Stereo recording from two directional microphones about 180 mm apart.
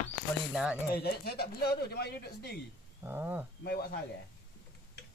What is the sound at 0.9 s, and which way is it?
Speech, 65° left (ahead or behind).